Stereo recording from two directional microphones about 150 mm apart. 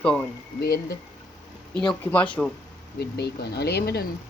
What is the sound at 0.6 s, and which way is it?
Speech, 90° left.